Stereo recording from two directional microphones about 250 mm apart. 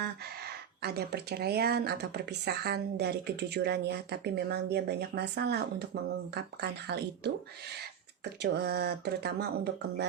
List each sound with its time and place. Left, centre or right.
0.0 s speech: right
8.2 s speech: right